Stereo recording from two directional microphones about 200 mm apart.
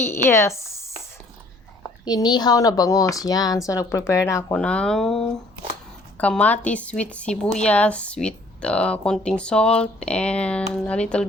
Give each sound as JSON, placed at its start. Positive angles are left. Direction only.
{"t": 0.0, "sound": "speech", "side_deg": 10}
{"t": 2.0, "sound": "a woman's voice", "side_deg": 20}